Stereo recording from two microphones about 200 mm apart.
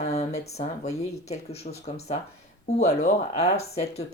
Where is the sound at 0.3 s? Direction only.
35° left (ahead or behind).